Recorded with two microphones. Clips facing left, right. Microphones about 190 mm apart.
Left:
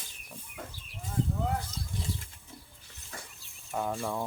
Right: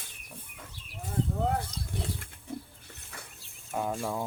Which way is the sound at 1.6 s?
60° right (ahead or behind).